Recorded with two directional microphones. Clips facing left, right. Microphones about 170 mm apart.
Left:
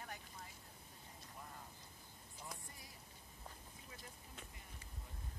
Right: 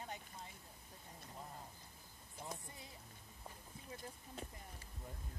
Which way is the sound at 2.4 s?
25° right (ahead or behind).